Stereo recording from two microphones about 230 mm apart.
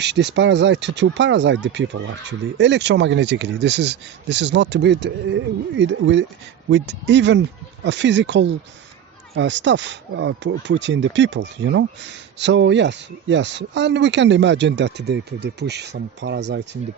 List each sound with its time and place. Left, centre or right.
0.0 s speech: right